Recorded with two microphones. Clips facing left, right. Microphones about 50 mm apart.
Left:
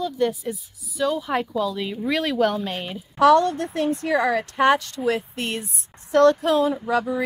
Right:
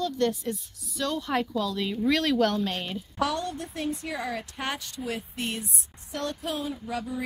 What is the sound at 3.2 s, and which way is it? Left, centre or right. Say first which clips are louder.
Speech: left 13 dB; left.